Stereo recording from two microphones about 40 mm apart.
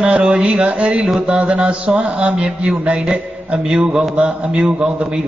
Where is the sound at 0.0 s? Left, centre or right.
Right.